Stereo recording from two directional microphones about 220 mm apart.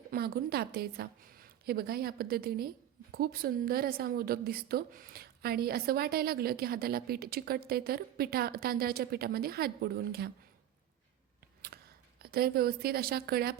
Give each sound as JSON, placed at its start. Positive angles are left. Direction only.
{"t": 0.1, "sound": "speech", "side_deg": -45}
{"t": 11.7, "sound": "a sound", "side_deg": -45}
{"t": 12.2, "sound": "speech", "side_deg": -45}